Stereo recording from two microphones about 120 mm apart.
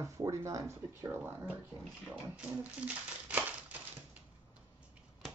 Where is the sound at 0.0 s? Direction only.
25° right (ahead or behind); by 4.2 s 10° right (ahead or behind).